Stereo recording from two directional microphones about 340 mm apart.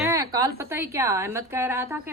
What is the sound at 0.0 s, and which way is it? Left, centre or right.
A woman's voice, centre.